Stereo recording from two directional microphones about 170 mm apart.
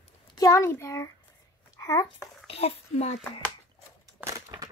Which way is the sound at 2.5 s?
35° left (ahead or behind).